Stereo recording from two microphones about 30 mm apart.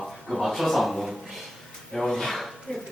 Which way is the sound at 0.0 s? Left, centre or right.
Centre.